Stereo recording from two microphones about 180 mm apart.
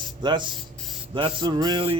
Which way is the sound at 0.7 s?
Centre (ahead or behind).